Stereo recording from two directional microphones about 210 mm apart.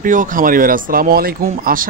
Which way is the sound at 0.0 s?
40° right (ahead or behind).